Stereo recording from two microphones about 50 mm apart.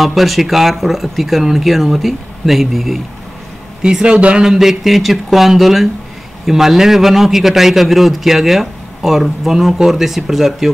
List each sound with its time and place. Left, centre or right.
0.0 s a man's voice: centre
3.8 s speech: centre
4.5 s a man's voice: centre